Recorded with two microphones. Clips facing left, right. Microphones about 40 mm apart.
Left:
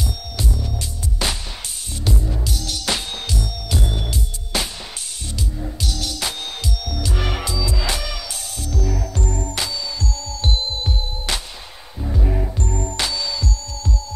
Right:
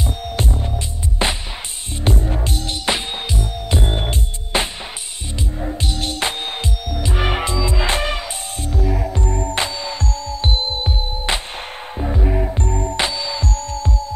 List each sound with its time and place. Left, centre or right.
0.0 s music: right
2.0 s music: right
13.4 s music: right